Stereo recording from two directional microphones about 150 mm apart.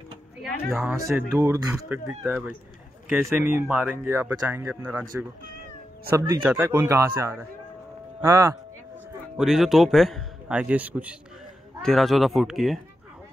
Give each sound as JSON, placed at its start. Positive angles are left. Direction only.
{"t": 0.7, "sound": "a man's voice", "side_deg": -5}
{"t": 0.9, "sound": "speech", "side_deg": -20}
{"t": 1.9, "sound": "speech", "side_deg": -10}
{"t": 6.0, "sound": "speech", "side_deg": -20}
{"t": 6.4, "sound": "speech", "side_deg": -10}
{"t": 6.7, "sound": "speech", "side_deg": -20}
{"t": 9.4, "sound": "a man's voice", "side_deg": 0}
{"t": 11.8, "sound": "a man's voice", "side_deg": 0}